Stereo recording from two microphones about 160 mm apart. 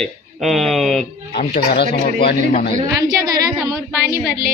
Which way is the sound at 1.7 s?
85° left.